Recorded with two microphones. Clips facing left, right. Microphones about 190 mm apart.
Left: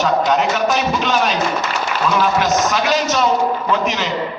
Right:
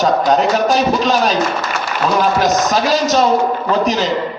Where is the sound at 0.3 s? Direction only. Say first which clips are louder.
Right 3 dB; 35° right (ahead or behind).